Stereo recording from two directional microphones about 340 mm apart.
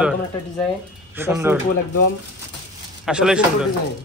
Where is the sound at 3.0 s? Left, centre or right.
Centre.